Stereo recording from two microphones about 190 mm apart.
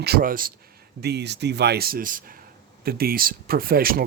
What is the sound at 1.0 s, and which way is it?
Speech, 60° right (ahead or behind).